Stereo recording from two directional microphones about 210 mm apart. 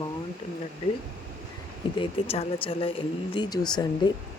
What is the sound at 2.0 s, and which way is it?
Speech, 30° left (ahead or behind).